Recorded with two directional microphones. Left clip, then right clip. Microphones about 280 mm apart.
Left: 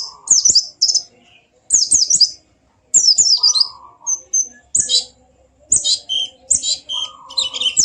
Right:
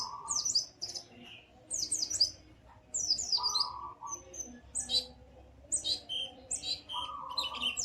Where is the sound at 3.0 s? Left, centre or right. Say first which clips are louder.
Left 19 dB; left.